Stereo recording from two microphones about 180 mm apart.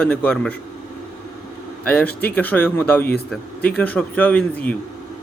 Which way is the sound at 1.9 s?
10° left (ahead or behind).